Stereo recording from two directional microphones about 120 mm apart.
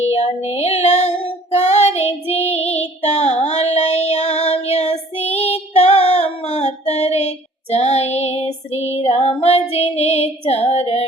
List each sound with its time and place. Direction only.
0.0 s child singing: 65° left (ahead or behind)